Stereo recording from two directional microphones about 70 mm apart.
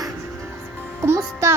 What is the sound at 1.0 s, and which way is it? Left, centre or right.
Music, right.